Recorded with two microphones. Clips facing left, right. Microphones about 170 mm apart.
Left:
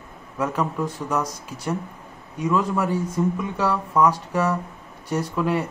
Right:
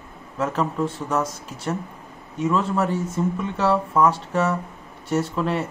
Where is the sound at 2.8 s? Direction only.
10° left (ahead or behind).